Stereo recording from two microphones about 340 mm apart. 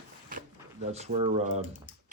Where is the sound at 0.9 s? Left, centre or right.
Centre.